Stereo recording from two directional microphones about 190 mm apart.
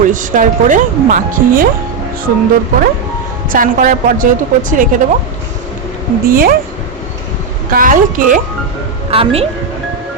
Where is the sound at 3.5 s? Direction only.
45° right (ahead or behind).